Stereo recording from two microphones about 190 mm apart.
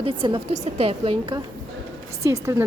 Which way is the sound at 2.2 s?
15° right (ahead or behind).